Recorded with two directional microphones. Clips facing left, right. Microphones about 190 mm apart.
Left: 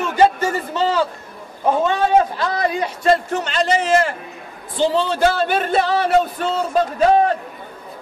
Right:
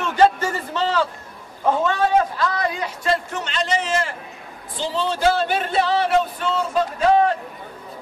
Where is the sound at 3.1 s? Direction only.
45° left (ahead or behind).